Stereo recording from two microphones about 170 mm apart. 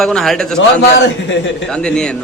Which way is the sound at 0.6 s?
90° left.